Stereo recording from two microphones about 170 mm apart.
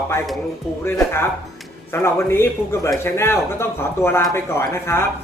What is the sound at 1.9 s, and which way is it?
Speech, 15° left (ahead or behind).